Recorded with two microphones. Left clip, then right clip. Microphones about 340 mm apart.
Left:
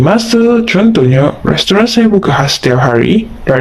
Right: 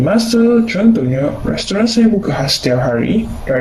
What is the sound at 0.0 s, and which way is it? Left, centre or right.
Speech, left.